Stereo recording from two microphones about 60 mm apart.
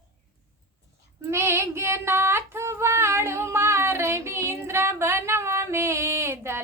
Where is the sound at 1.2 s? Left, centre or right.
Right.